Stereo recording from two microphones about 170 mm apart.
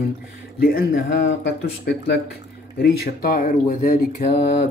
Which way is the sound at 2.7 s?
70° left (ahead or behind).